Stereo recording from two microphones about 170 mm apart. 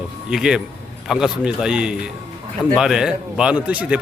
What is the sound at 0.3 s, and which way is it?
A man's voice, 5° right (ahead or behind).